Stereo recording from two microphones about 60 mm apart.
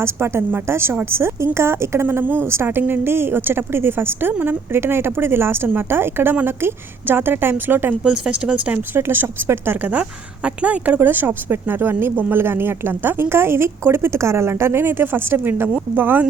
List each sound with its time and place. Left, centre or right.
0.0 s a woman's voice: right
8.0 s speech: centre
9.0 s speech: right
9.8 s speech: right